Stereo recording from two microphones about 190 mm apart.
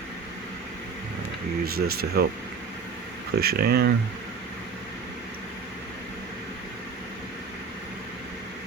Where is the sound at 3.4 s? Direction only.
55° right (ahead or behind).